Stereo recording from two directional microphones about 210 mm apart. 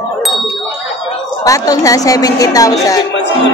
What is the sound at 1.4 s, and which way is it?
Speech, 15° left (ahead or behind).